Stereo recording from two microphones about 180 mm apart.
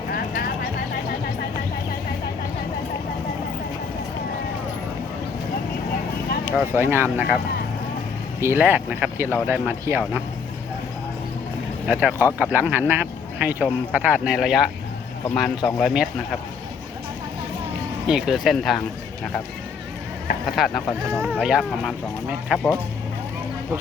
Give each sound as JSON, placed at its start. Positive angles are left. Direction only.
{"t": 0.1, "sound": "a sound", "side_deg": 55}
{"t": 6.4, "sound": "speech", "side_deg": -10}
{"t": 8.4, "sound": "speech", "side_deg": -10}
{"t": 11.9, "sound": "speech", "side_deg": -10}
{"t": 18.1, "sound": "speech", "side_deg": -5}
{"t": 20.6, "sound": "speech", "side_deg": 0}
{"t": 21.1, "sound": "speech", "side_deg": -15}
{"t": 21.4, "sound": "speech", "side_deg": -5}